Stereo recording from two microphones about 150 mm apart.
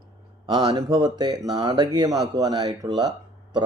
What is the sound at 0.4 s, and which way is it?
A man's voice, 30° right (ahead or behind).